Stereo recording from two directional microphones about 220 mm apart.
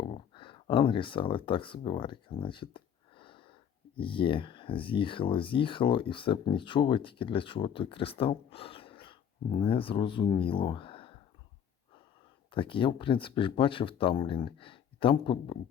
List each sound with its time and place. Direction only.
0.0 s a sound: 25° left (ahead or behind)
3.9 s speech: 25° left (ahead or behind)
12.5 s speech: 25° left (ahead or behind)